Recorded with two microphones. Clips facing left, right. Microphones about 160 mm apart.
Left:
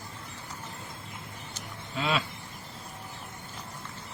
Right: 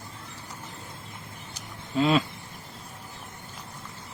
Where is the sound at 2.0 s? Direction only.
40° right (ahead or behind).